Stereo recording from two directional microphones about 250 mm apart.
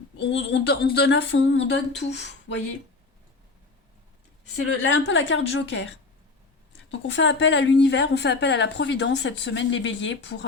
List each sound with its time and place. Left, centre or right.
0.2 s a woman's voice: left
4.8 s a woman's voice: left
7.1 s a woman's voice: left